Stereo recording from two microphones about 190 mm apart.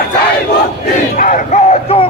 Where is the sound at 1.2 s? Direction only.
40° left (ahead or behind).